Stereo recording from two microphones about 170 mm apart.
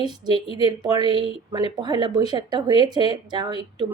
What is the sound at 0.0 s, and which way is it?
Speech, 25° right (ahead or behind).